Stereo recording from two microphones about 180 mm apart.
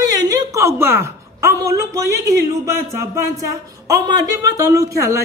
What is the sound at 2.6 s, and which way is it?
Speech, 15° right (ahead or behind).